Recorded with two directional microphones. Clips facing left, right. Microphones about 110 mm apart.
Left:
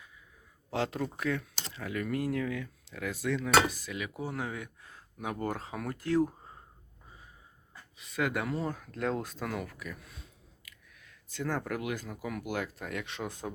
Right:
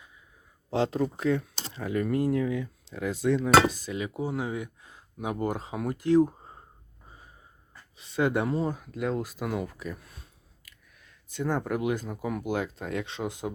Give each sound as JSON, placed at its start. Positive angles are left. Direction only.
{"t": 0.7, "sound": "speech", "side_deg": -25}
{"t": 7.9, "sound": "speech", "side_deg": -30}
{"t": 9.4, "sound": "speech", "side_deg": -20}
{"t": 11.3, "sound": "speech", "side_deg": -20}